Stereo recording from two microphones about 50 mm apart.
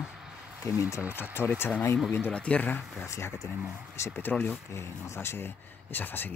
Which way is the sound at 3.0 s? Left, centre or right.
Left.